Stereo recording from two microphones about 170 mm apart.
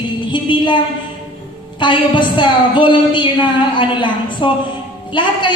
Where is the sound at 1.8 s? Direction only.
30° left (ahead or behind).